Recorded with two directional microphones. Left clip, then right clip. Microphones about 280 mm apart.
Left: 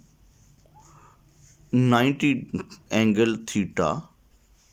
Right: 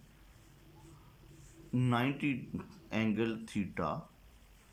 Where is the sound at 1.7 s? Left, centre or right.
Left.